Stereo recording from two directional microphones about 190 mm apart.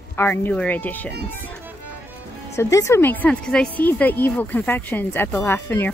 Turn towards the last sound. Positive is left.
turn(degrees=10)  # may be behind; listen again after turning